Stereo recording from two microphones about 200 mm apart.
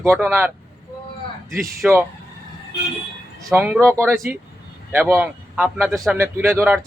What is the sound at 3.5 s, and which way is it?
Speech, 10° right (ahead or behind).